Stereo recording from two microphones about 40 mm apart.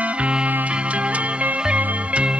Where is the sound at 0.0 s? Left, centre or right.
Right.